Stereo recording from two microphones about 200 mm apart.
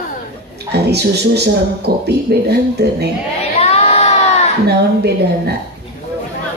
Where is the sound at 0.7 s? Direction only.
55° right (ahead or behind).